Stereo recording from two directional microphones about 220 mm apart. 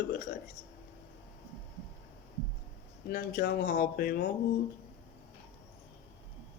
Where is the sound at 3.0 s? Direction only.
45° left (ahead or behind).